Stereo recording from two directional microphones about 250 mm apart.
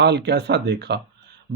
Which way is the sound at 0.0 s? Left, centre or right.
Right.